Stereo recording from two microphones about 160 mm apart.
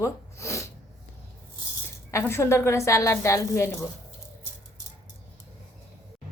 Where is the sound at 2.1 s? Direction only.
15° left (ahead or behind).